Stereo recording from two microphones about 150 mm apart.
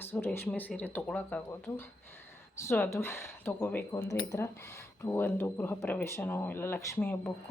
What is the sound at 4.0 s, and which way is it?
Speech, 25° left (ahead or behind).